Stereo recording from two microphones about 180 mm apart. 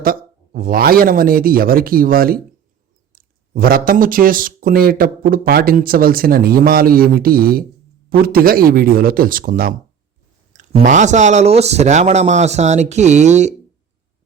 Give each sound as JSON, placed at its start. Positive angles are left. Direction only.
{"t": 0.0, "sound": "speech", "side_deg": -55}